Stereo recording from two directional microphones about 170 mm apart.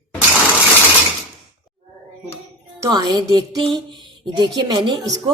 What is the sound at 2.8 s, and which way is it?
Speech, 25° right (ahead or behind).